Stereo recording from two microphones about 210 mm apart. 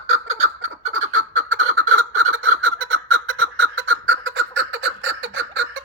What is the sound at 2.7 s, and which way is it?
Fowl, 80° right.